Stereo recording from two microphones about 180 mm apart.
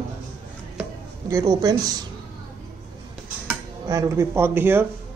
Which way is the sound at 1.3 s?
20° right (ahead or behind).